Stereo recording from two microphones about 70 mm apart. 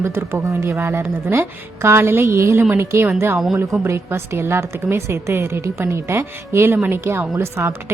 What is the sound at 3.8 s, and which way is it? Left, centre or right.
A woman's voice, right.